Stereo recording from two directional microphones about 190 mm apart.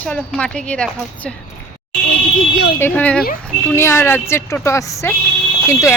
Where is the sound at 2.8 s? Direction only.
10° left (ahead or behind).